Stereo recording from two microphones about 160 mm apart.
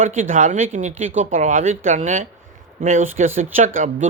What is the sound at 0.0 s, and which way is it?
Speech, 50° right (ahead or behind).